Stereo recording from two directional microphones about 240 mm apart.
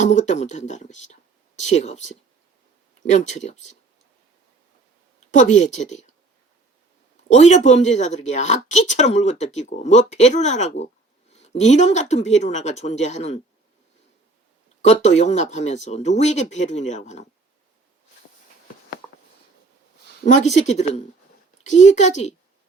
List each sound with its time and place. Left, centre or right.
0.0 s speech: left
5.3 s speech: left
7.3 s speech: left
14.8 s speech: left
20.1 s speech: left